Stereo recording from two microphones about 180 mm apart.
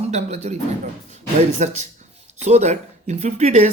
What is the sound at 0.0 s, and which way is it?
Speech, 40° right (ahead or behind).